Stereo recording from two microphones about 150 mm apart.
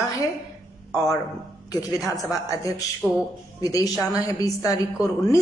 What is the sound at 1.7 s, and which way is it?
A woman's voice, 25° left (ahead or behind).